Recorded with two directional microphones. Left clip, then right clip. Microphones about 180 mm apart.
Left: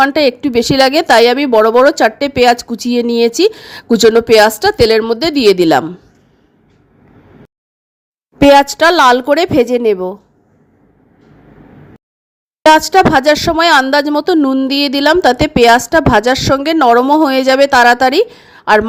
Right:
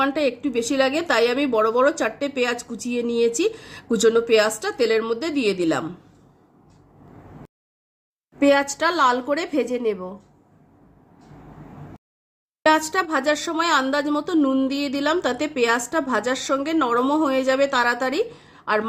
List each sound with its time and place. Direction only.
0.0 s a woman's voice: 45° left (ahead or behind)
8.4 s a woman's voice: 50° left (ahead or behind)
12.6 s a woman's voice: 45° left (ahead or behind)